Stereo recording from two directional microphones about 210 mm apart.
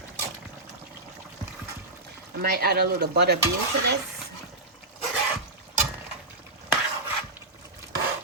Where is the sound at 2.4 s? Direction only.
50° right (ahead or behind).